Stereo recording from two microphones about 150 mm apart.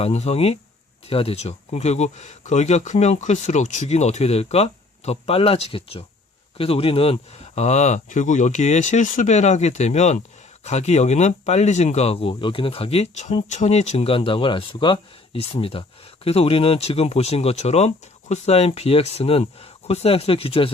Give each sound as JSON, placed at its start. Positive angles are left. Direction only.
{"t": 0.0, "sound": "speech", "side_deg": 45}